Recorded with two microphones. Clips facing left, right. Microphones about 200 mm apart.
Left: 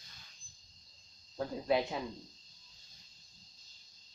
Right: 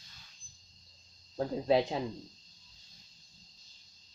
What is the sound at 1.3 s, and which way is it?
Speech, 35° right (ahead or behind).